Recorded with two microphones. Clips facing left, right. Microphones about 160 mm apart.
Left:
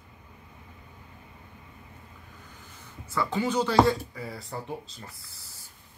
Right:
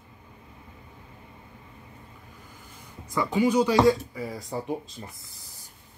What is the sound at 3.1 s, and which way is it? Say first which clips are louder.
Speech: right 4 dB; 15° right (ahead or behind).